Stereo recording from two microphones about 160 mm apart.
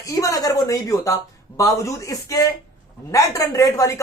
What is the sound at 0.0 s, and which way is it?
A woman's voice, 20° left (ahead or behind).